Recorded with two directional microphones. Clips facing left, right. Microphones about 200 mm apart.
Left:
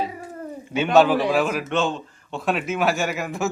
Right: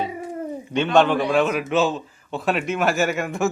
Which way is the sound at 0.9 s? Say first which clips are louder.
Left 1 dB; 5° left (ahead or behind).